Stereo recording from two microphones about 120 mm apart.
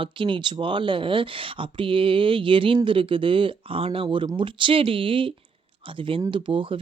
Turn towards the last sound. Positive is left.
turn(degrees=-45)  # may be behind; listen again after turning